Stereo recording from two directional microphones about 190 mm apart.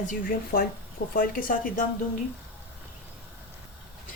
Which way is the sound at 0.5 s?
50° left (ahead or behind).